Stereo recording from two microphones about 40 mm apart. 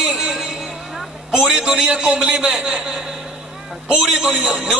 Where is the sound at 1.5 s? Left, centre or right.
Centre.